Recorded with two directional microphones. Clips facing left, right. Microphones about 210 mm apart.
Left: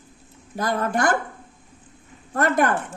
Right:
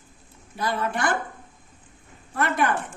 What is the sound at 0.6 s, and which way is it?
Speech, 45° left (ahead or behind).